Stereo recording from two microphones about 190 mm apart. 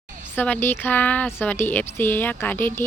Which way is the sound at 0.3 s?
10° left (ahead or behind).